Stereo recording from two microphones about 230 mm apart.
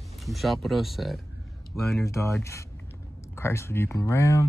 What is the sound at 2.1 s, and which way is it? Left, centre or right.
Speech, centre.